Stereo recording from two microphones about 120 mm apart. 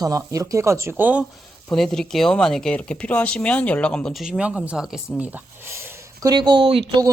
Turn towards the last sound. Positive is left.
turn(degrees=-50)  # may be behind; listen again after turning